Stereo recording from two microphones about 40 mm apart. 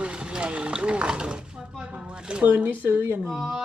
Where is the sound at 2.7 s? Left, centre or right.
Right.